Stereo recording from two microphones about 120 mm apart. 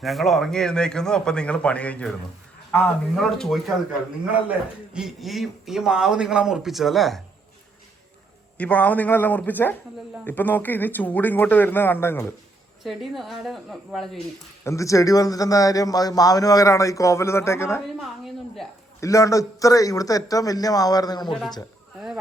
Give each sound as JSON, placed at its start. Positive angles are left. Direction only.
{"t": 0.0, "sound": "speech", "side_deg": 0}
{"t": 3.2, "sound": "speech", "side_deg": 5}
{"t": 4.9, "sound": "speech", "side_deg": 0}
{"t": 8.5, "sound": "speech", "side_deg": 10}
{"t": 12.8, "sound": "speech", "side_deg": 0}
{"t": 14.6, "sound": "speech", "side_deg": 25}
{"t": 18.9, "sound": "speech", "side_deg": 25}